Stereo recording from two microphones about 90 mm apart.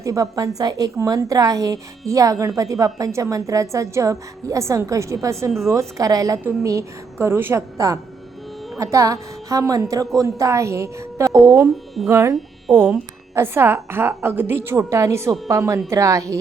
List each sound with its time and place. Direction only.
0.0 s a woman's voice: 40° right (ahead or behind)
8.8 s a woman's voice: 35° right (ahead or behind)
12.6 s speech: 5° left (ahead or behind)
13.3 s a woman's voice: 25° right (ahead or behind)